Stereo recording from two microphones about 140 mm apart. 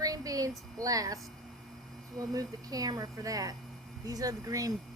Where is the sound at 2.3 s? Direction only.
25° right (ahead or behind).